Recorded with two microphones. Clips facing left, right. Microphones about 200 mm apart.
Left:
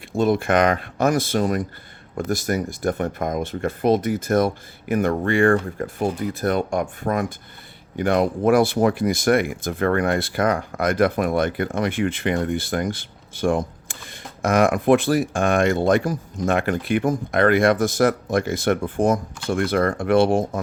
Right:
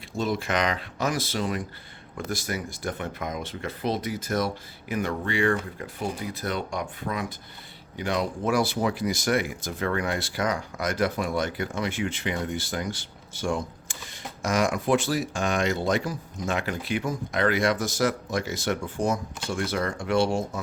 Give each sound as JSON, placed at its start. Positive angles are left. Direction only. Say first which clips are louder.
{"t": 0.1, "sound": "speech", "louder": "left 8 dB", "side_deg": 55}